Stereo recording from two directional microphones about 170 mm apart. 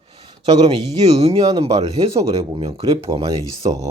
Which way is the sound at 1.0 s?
40° right (ahead or behind).